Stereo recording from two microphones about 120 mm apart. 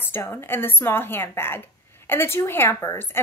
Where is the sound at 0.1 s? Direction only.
20° left (ahead or behind).